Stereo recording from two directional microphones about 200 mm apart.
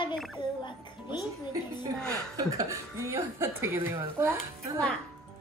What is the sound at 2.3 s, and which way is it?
Speech, 15° right (ahead or behind).